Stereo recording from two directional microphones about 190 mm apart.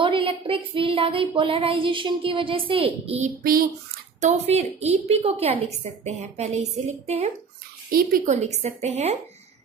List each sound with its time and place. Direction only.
0.0 s a woman's voice: 25° right (ahead or behind)
3.4 s a woman's voice: 50° right (ahead or behind)
4.2 s a woman's voice: 35° right (ahead or behind)
7.9 s a woman's voice: 50° right (ahead or behind)
8.4 s a woman's voice: 35° right (ahead or behind)